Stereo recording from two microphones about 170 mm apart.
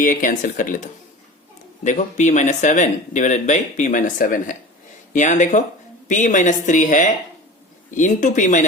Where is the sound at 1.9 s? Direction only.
45° left (ahead or behind).